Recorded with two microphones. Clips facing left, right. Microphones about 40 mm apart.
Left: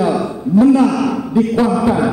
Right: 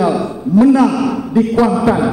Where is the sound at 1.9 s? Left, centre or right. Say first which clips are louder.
Right 2 dB; right.